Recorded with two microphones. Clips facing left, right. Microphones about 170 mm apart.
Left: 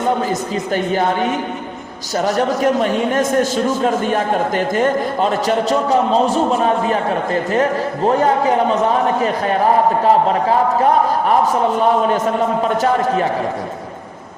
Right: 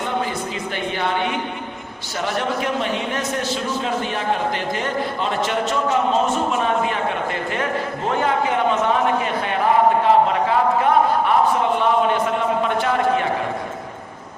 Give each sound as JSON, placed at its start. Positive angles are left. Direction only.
{"t": 0.0, "sound": "a man's voice", "side_deg": 40}